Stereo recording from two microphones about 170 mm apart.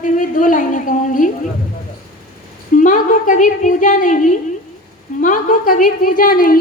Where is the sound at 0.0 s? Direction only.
50° left (ahead or behind).